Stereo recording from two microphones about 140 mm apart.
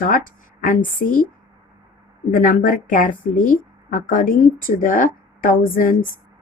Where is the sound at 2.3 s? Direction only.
80° left.